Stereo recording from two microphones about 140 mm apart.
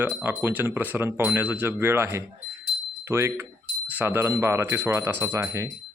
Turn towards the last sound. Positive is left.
turn(degrees=-20)  # may be behind; listen again after turning